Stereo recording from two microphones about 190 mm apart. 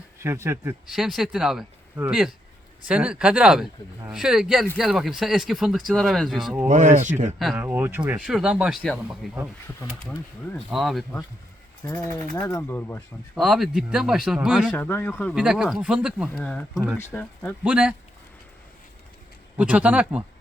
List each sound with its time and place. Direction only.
0.2 s a man's voice: 15° right (ahead or behind)
0.9 s speech: centre (ahead or behind)
6.7 s speech: 40° right (ahead or behind)
7.3 s speech: 5° right (ahead or behind)
11.8 s speech: 15° left (ahead or behind)
13.3 s speech: centre (ahead or behind)
14.8 s speech: 10° left (ahead or behind)
17.6 s a man's voice: 5° right (ahead or behind)
19.5 s a man's voice: 5° right (ahead or behind)